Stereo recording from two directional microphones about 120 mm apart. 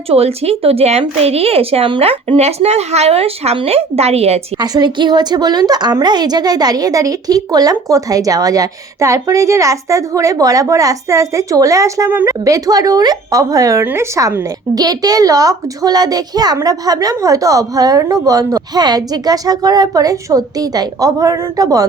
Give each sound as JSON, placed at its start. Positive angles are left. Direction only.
{"t": 0.1, "sound": "a woman's voice", "side_deg": -55}
{"t": 4.5, "sound": "a woman's voice", "side_deg": -35}